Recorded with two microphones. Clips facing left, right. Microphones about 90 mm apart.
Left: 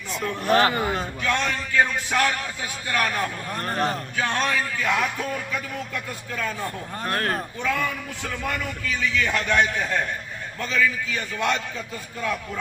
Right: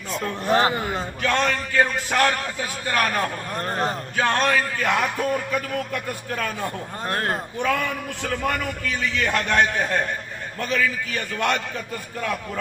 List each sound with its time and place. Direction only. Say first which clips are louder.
0.1 s a man's voice: even; 30° right (ahead or behind)
1.2 s a man's voice: right 5 dB; 55° right (ahead or behind)
3.6 s a man's voice: even; 30° right (ahead or behind)
4.2 s a man's voice: right 4 dB; 50° right (ahead or behind)
7.1 s a man's voice: even; 25° right (ahead or behind)
8.2 s a man's voice: right 4 dB; 50° right (ahead or behind)